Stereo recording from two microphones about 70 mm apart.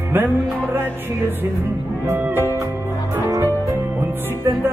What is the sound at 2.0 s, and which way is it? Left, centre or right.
Speech, right.